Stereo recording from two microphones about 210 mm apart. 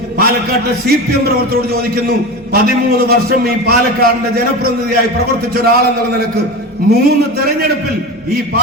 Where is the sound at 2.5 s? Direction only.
45° right (ahead or behind).